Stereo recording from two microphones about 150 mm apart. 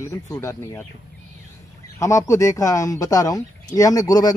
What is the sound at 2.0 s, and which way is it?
Speech, 20° left (ahead or behind).